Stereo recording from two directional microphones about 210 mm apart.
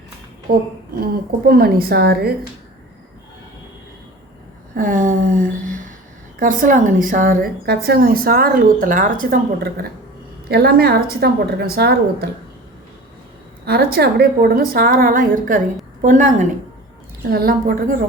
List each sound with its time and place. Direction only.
1.5 s a woman's voice: 45° right (ahead or behind)
4.7 s a woman's voice: 40° right (ahead or behind)
13.7 s a woman's voice: 50° right (ahead or behind)